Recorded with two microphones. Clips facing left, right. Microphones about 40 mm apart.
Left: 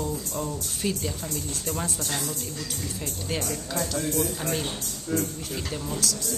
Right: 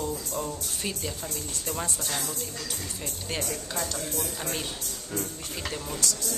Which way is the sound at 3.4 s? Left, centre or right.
Centre.